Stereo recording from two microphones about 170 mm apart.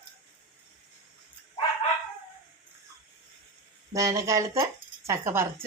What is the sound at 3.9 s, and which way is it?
A woman's voice, 20° right (ahead or behind).